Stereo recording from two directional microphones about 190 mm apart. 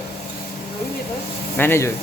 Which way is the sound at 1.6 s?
10° left (ahead or behind).